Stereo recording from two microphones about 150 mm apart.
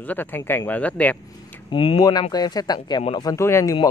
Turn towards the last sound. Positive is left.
turn(degrees=20)  # may be behind; listen again after turning